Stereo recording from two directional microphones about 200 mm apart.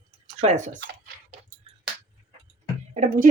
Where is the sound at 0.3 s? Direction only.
35° right (ahead or behind).